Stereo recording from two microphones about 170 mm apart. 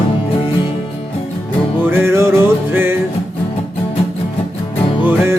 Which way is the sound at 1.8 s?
15° right (ahead or behind).